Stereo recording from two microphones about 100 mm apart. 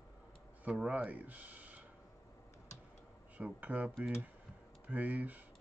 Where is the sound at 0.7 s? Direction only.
15° right (ahead or behind).